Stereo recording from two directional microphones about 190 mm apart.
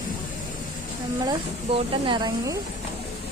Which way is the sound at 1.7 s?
25° right (ahead or behind).